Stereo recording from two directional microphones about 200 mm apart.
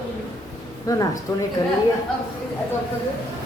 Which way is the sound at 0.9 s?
15° left (ahead or behind).